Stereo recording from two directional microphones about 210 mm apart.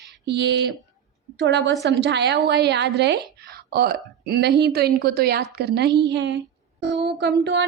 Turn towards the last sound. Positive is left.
turn(degrees=-50)  # may be behind; listen again after turning